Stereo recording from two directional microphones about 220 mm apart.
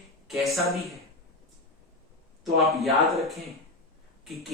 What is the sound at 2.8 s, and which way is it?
Speech, centre (ahead or behind).